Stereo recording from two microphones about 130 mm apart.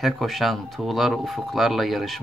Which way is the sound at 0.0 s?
Centre (ahead or behind).